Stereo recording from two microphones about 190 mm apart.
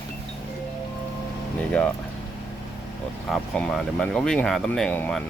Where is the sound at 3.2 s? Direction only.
Centre (ahead or behind).